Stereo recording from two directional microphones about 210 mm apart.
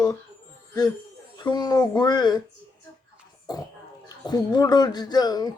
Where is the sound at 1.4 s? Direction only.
20° left (ahead or behind).